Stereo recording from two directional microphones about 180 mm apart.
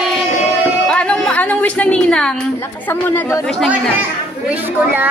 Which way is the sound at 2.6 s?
10° left (ahead or behind).